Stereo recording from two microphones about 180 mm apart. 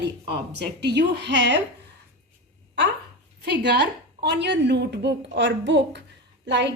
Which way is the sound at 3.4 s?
70° right (ahead or behind).